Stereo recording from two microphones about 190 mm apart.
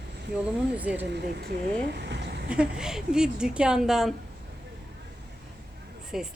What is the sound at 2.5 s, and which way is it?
Speech, 5° right (ahead or behind).